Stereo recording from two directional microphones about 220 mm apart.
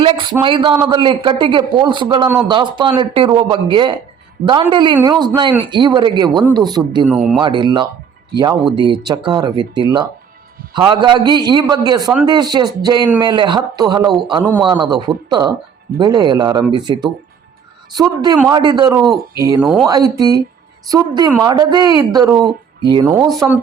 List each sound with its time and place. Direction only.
0.0 s a man's voice: 25° right (ahead or behind)
19.6 s speech: centre (ahead or behind)
19.9 s a woman's voice: 15° right (ahead or behind)